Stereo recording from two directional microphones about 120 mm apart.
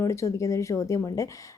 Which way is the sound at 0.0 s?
25° left (ahead or behind).